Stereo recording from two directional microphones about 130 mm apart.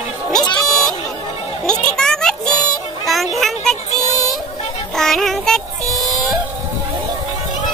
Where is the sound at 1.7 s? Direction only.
5° left (ahead or behind).